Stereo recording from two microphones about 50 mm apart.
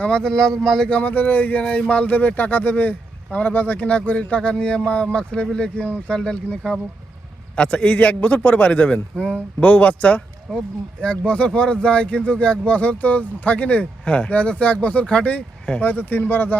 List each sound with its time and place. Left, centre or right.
0.1 s speech: centre
0.9 s speech: left
1.1 s speech: left
1.6 s speech: left
10.5 s speech: centre
11.3 s speech: left
15.8 s speech: left